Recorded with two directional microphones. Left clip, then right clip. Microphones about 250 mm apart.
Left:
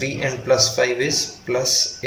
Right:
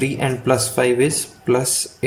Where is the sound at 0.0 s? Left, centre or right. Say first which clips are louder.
Right 3 dB; right.